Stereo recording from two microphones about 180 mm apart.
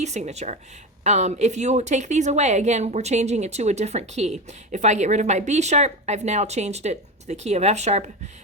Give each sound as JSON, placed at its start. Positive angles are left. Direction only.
{"t": 0.0, "sound": "a woman's voice", "side_deg": -40}